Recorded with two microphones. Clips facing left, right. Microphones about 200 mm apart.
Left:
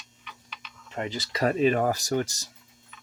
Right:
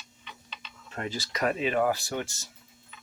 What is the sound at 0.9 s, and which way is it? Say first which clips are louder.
Speech: left 2 dB; 20° left (ahead or behind).